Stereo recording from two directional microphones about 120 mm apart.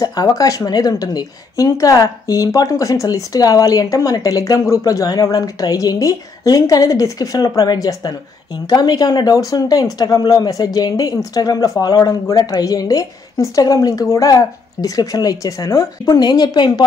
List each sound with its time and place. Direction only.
0.0 s a woman's voice: 30° left (ahead or behind)